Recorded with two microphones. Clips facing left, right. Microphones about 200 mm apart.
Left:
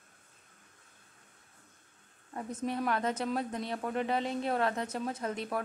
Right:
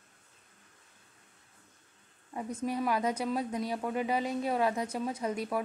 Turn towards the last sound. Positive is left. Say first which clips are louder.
# right 2 dB
turn(degrees=-10)  # may be behind; listen again after turning